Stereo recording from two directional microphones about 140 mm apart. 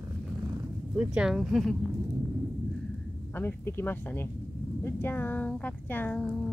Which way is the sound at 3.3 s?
15° left (ahead or behind).